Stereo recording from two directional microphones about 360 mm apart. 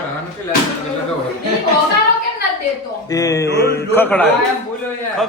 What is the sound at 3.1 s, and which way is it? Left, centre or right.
Speech, centre.